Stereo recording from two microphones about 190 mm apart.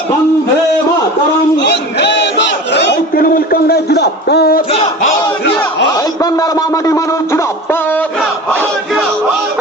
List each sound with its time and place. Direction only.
1.5 s battle cry: 60° left (ahead or behind)
6.0 s a sound: 15° left (ahead or behind)
8.5 s battle cry: centre (ahead or behind)